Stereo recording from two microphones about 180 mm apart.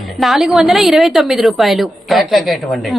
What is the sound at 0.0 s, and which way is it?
A woman's voice, centre (ahead or behind).